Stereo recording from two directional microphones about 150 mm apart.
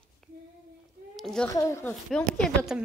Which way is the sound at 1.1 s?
Centre (ahead or behind).